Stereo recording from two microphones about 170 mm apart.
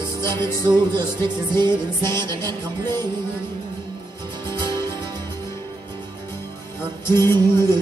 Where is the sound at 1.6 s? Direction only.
25° right (ahead or behind).